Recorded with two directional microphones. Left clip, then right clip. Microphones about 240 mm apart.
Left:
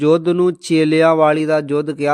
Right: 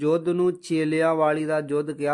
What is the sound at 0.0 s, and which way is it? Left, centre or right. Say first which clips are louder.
A man's voice: left 8 dB; left.